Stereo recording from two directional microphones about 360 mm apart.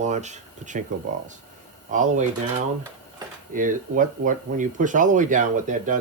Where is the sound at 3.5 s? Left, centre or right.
Right.